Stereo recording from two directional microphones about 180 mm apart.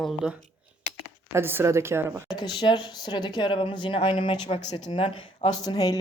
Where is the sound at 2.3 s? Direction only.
25° left (ahead or behind).